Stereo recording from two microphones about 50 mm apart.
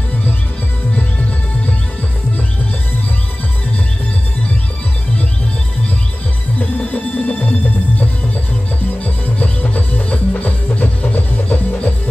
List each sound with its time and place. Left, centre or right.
6.6 s music: left
9.0 s music: left